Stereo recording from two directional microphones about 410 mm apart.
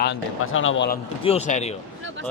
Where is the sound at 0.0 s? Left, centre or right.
Left.